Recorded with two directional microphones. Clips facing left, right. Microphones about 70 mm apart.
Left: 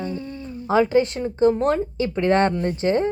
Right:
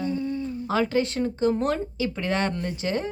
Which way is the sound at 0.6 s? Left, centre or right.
Left.